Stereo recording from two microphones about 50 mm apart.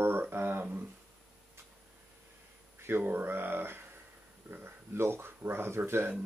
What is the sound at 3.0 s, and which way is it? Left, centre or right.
Speech, right.